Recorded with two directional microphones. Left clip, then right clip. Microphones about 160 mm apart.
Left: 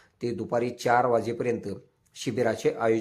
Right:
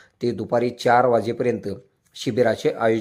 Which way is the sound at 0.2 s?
20° right (ahead or behind).